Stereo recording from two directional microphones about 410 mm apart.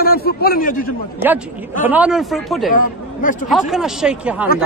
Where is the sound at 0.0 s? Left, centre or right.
Left.